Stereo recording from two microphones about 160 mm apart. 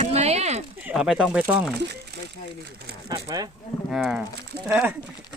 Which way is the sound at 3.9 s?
5° right (ahead or behind).